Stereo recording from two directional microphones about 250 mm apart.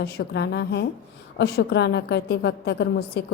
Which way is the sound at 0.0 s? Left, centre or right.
Left.